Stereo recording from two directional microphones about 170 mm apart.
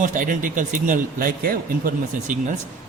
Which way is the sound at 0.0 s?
50° right (ahead or behind).